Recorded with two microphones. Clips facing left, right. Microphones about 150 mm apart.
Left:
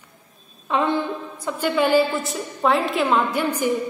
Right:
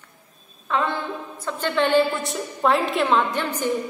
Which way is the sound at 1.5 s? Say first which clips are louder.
Left 2 dB; 10° left (ahead or behind).